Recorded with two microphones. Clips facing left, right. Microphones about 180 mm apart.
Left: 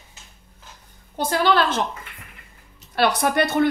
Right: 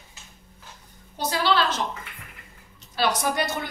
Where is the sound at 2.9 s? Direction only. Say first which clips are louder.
Left 5 dB; 60° left (ahead or behind).